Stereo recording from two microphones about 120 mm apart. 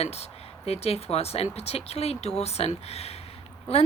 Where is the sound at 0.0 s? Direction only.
60° left (ahead or behind).